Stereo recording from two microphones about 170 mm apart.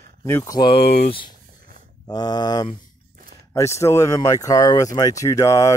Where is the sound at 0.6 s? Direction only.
30° left (ahead or behind).